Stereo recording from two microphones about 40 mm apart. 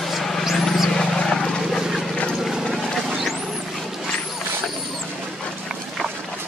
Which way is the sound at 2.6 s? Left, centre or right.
Centre.